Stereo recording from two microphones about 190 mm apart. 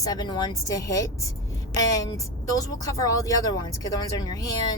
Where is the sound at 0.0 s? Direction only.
20° left (ahead or behind).